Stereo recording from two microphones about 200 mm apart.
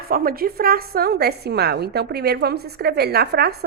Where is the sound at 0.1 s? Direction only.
45° right (ahead or behind).